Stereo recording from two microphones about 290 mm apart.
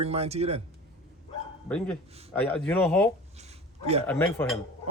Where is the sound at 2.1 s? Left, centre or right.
Right.